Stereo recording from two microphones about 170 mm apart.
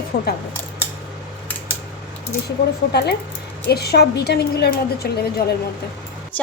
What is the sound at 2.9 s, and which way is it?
A woman's voice, 75° left (ahead or behind).